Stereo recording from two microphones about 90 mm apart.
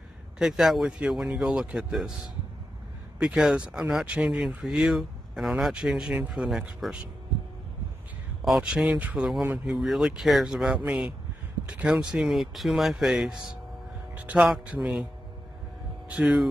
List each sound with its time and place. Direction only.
0.4 s a man's voice: 5° right (ahead or behind)
8.5 s a man's voice: 5° right (ahead or behind)
9.7 s speech: 5° right (ahead or behind)
10.8 s a man's voice: 20° right (ahead or behind)
16.1 s a man's voice: 10° right (ahead or behind)